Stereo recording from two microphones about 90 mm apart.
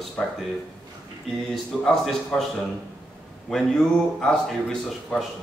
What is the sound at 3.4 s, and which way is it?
A man's voice, 5° left (ahead or behind).